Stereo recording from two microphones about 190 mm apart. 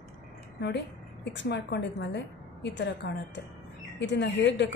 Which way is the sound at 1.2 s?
65° left (ahead or behind).